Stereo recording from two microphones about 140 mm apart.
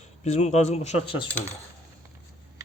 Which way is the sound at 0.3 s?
55° left (ahead or behind).